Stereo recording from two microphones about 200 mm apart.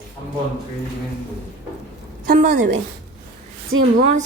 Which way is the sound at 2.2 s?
40° right (ahead or behind).